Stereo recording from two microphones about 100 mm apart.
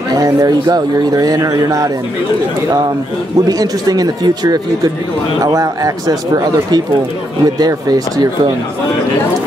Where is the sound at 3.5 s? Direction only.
40° right (ahead or behind).